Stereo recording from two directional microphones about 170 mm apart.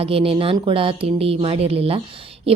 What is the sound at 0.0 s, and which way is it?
A woman's voice, 35° right (ahead or behind).